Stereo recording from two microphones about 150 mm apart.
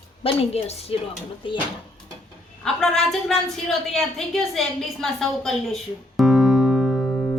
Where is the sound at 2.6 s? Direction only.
5° left (ahead or behind).